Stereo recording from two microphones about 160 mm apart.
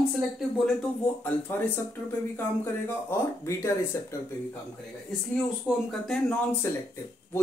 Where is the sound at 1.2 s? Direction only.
10° left (ahead or behind).